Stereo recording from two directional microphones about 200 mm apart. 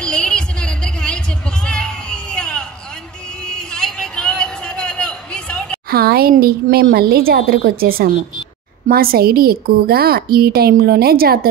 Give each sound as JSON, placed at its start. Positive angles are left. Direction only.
{"t": 0.0, "sound": "music", "side_deg": 5}
{"t": 3.4, "sound": "a sound", "side_deg": 5}
{"t": 5.9, "sound": "a woman's voice", "side_deg": -50}